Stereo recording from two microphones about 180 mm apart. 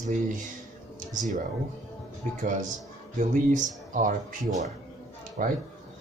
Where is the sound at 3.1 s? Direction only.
45° right (ahead or behind).